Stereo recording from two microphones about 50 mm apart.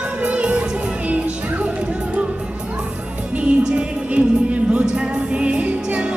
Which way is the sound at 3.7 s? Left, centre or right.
Right.